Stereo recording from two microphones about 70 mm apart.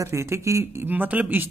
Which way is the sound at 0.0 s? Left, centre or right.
Right.